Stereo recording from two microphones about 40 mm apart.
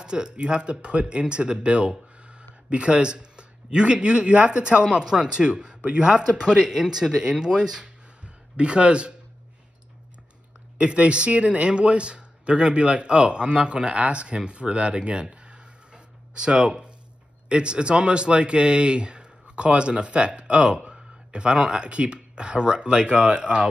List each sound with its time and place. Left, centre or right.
0.0 s speech: right
6.7 s speech: centre
8.5 s speech: right
10.8 s speech: right